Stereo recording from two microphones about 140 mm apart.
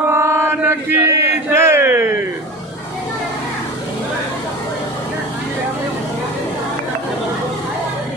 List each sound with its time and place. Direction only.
0.1 s chant: 20° right (ahead or behind)